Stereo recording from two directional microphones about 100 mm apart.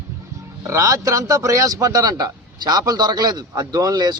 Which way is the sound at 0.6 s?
30° right (ahead or behind).